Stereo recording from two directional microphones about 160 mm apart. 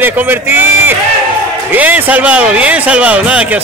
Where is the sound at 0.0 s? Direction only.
10° right (ahead or behind).